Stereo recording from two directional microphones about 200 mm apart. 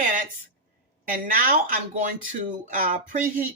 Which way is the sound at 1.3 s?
45° right (ahead or behind).